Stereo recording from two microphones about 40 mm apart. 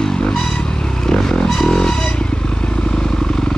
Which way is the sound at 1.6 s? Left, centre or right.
Centre.